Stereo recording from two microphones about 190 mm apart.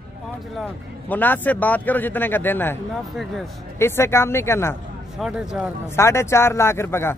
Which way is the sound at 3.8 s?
15° left (ahead or behind).